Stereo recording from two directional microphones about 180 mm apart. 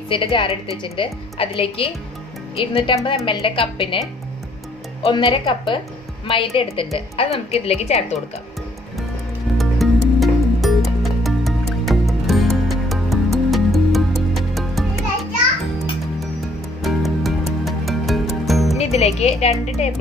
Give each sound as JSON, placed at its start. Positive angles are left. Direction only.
{"t": 0.1, "sound": "a woman's voice", "side_deg": 30}
{"t": 5.0, "sound": "a woman's voice", "side_deg": 25}
{"t": 9.6, "sound": "music", "side_deg": 0}
{"t": 16.8, "sound": "music", "side_deg": 0}
{"t": 18.8, "sound": "a woman's voice", "side_deg": 35}